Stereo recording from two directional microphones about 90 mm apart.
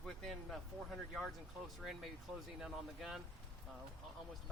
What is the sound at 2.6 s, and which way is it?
Speech, 5° right (ahead or behind).